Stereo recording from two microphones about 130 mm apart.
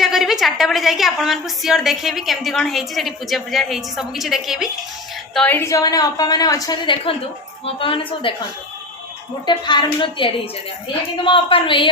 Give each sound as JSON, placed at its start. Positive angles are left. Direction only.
{"t": 0.0, "sound": "a woman's voice", "side_deg": 0}
{"t": 5.5, "sound": "a woman's voice", "side_deg": 20}
{"t": 6.8, "sound": "a woman's voice", "side_deg": 45}
{"t": 9.5, "sound": "a woman's voice", "side_deg": 35}